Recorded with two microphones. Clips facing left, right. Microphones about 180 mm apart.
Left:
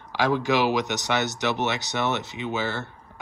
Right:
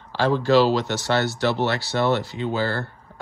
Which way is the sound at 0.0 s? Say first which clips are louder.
Right 2 dB; 15° left (ahead or behind).